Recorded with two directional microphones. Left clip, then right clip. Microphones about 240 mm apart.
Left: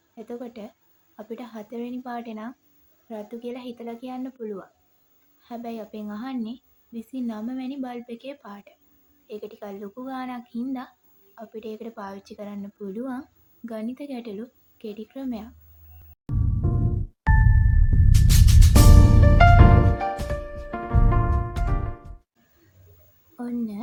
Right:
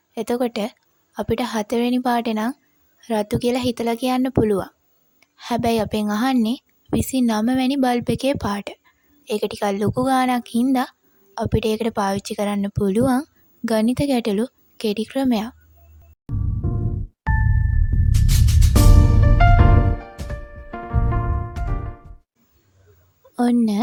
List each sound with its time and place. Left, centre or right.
0.1 s a woman's voice: right
16.3 s music: centre
23.4 s speech: right